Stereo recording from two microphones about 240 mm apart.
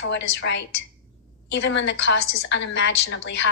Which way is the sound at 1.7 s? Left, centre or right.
Left.